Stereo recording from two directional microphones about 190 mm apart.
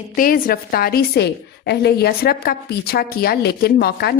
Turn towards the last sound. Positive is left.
turn(degrees=55)  # may be behind; listen again after turning